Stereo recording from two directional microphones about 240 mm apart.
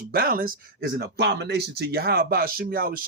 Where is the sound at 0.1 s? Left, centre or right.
Right.